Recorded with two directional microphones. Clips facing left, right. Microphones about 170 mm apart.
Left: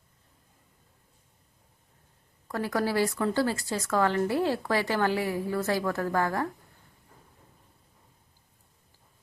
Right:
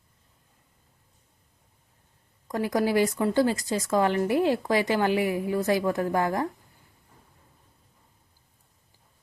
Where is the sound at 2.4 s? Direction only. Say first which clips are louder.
Right 3 dB; 15° right (ahead or behind).